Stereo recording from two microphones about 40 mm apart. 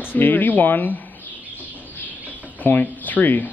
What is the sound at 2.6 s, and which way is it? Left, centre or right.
Speech, left.